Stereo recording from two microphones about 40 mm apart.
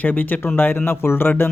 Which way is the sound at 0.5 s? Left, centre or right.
Left.